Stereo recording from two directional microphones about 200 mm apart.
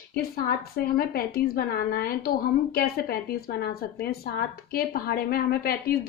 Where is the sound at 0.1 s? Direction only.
50° left (ahead or behind).